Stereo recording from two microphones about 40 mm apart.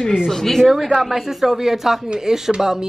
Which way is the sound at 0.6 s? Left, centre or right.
Centre.